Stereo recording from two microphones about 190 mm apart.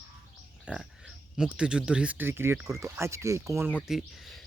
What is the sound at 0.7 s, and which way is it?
Speech, 5° right (ahead or behind).